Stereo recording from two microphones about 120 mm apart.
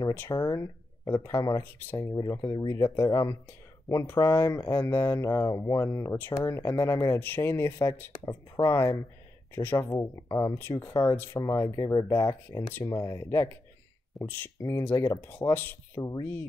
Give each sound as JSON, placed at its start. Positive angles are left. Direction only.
{"t": 0.3, "sound": "speech", "side_deg": 30}
{"t": 7.2, "sound": "speech", "side_deg": 15}
{"t": 8.3, "sound": "speech", "side_deg": 35}
{"t": 9.6, "sound": "speech", "side_deg": 20}
{"t": 12.7, "sound": "speech", "side_deg": 20}
{"t": 16.0, "sound": "speech", "side_deg": 30}